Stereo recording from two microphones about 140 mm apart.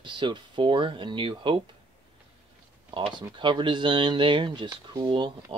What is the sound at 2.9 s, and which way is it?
Speech, 35° right (ahead or behind).